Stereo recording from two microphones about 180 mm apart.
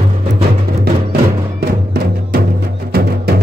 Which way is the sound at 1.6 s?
60° right (ahead or behind).